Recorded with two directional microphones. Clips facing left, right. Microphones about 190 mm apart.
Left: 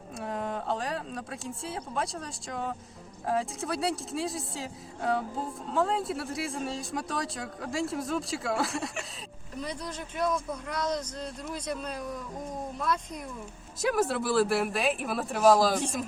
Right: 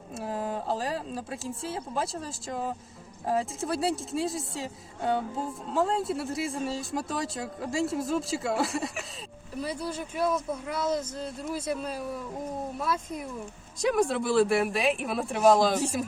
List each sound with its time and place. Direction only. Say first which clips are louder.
0.1 s speech: right 1 dB; 5° right (ahead or behind)
15.7 s a man's voice: right 2 dB; 10° right (ahead or behind)